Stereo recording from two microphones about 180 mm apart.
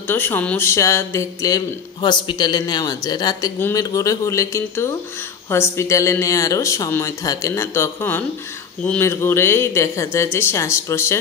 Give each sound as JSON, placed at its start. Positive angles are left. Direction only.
{"t": 0.1, "sound": "speech", "side_deg": 10}